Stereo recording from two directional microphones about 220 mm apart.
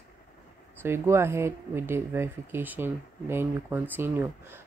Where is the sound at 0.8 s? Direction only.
10° right (ahead or behind).